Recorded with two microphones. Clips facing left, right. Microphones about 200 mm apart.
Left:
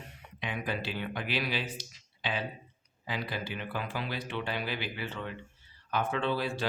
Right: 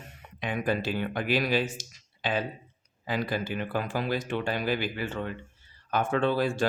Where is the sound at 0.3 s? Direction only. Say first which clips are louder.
Right 6 dB; 45° right (ahead or behind).